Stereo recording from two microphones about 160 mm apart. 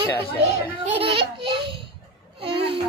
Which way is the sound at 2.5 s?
35° right (ahead or behind).